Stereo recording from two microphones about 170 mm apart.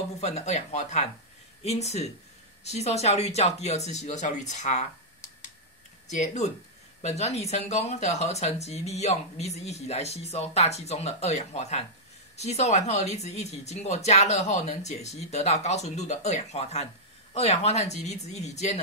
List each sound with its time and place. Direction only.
0.2 s speech: 40° left (ahead or behind)
6.0 s speech: 45° left (ahead or behind)